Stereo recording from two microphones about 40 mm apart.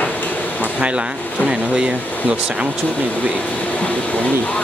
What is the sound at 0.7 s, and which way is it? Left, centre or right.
Speech, right.